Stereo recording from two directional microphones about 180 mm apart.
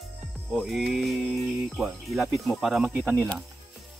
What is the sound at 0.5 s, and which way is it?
Speech, centre (ahead or behind).